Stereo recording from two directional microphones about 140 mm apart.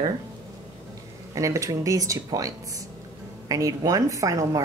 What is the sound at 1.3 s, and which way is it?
Speech, 25° right (ahead or behind).